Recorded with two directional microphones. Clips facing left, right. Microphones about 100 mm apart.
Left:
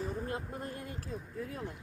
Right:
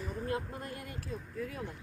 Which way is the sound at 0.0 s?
30° left (ahead or behind).